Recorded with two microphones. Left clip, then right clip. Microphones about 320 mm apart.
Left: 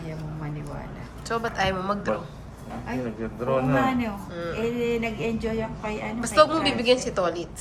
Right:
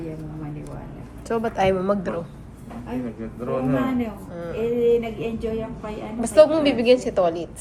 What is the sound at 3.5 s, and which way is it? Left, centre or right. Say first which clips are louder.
Speech: left 1 dB; left.